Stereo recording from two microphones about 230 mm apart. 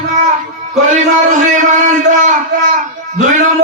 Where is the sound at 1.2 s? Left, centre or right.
Right.